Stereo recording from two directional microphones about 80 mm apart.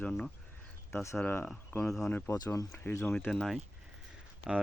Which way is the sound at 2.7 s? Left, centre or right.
Left.